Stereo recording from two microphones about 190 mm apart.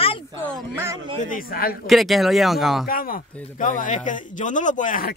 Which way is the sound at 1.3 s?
50° left (ahead or behind).